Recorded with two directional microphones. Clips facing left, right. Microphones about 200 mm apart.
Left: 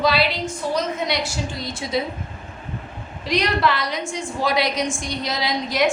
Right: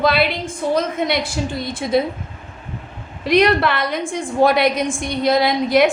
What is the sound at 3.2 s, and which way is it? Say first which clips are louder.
A woman's voice: right 6 dB; 60° right (ahead or behind).